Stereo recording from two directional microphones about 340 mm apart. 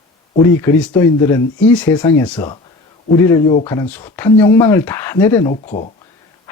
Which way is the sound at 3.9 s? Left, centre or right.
Centre.